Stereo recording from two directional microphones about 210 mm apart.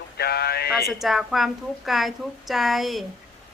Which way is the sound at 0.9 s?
Centre (ahead or behind).